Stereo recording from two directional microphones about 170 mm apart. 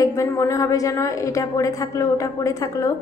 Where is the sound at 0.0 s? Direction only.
15° left (ahead or behind).